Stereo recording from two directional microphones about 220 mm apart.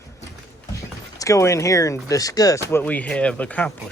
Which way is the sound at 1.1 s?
15° left (ahead or behind).